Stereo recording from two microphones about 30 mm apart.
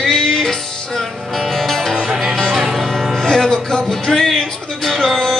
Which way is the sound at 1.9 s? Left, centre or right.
Centre.